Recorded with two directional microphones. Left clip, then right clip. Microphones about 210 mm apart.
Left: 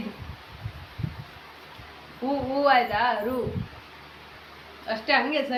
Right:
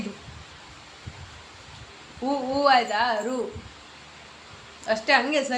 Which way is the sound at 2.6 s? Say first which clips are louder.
Right 1 dB; 25° right (ahead or behind).